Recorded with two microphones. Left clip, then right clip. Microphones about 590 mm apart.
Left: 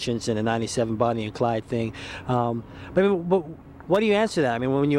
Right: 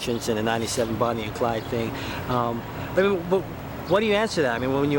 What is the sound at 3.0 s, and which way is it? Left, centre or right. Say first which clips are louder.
Speech: left 1 dB; left.